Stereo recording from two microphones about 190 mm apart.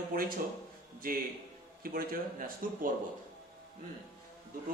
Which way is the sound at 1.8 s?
50° right (ahead or behind).